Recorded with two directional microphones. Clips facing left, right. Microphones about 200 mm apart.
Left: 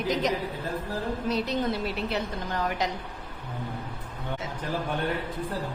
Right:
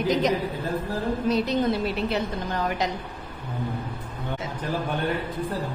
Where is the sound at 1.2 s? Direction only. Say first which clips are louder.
Right 5 dB; 20° right (ahead or behind).